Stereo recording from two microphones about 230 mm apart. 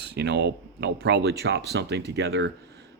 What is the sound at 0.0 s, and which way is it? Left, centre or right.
Speech, right.